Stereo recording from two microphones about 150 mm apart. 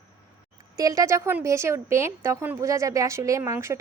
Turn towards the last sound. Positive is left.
turn(degrees=-15)  # may be behind; listen again after turning